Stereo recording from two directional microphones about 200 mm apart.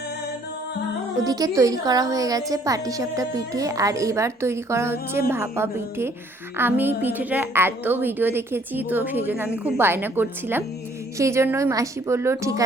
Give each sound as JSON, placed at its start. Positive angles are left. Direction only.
{"t": 1.2, "sound": "a woman's voice", "side_deg": -20}